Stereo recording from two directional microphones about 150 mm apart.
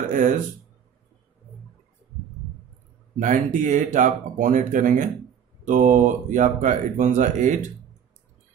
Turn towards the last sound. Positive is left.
turn(degrees=-55)  # may be behind; listen again after turning